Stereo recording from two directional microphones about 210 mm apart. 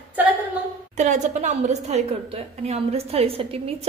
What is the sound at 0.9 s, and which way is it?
A woman's voice, 35° right (ahead or behind).